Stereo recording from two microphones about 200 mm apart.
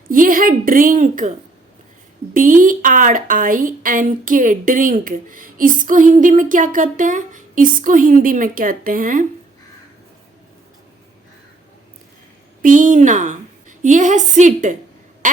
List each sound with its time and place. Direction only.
0.1 s a woman's voice: 45° right (ahead or behind)
2.3 s a woman's voice: 40° right (ahead or behind)
12.6 s a woman's voice: 40° right (ahead or behind)